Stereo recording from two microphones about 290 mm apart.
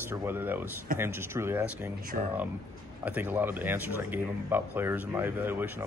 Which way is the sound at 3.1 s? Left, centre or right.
Centre.